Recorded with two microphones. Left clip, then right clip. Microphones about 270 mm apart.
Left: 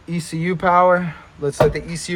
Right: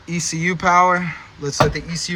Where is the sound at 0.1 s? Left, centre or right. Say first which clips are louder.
Right 3 dB; centre.